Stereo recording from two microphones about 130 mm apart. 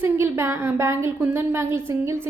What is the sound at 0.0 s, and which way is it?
A woman's voice, 20° right (ahead or behind).